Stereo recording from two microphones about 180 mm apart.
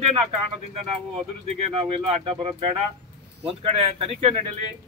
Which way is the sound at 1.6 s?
30° right (ahead or behind).